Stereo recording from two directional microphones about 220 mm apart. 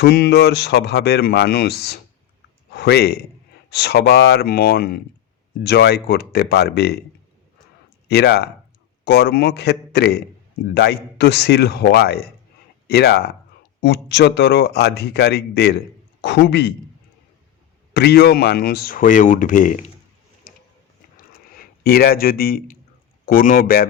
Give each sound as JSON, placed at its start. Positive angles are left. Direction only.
{"t": 0.0, "sound": "speech", "side_deg": 45}
{"t": 8.0, "sound": "speech", "side_deg": 50}
{"t": 17.9, "sound": "speech", "side_deg": 45}
{"t": 20.5, "sound": "a sound", "side_deg": 40}
{"t": 21.8, "sound": "speech", "side_deg": 45}